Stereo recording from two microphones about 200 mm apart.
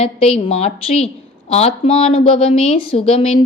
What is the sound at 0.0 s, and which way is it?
A woman's voice, 30° left (ahead or behind).